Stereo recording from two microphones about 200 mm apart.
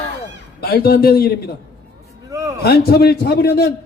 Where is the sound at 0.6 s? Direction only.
50° left (ahead or behind).